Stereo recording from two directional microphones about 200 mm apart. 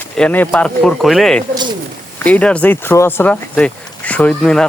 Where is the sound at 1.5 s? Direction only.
20° right (ahead or behind).